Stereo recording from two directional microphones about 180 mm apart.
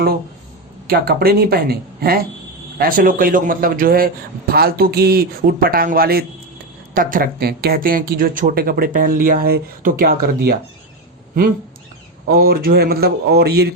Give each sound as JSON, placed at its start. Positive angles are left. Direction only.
{"t": 0.9, "sound": "a man's voice", "side_deg": -60}
{"t": 12.2, "sound": "a man's voice", "side_deg": -55}